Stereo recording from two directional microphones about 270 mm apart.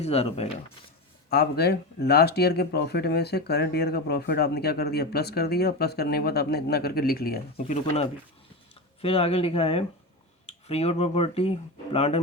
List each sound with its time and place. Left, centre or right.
0.0 s speech: left
1.3 s speech: left
9.0 s speech: left